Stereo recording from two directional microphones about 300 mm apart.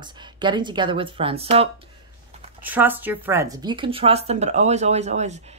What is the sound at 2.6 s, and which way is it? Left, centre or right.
A woman's voice, centre.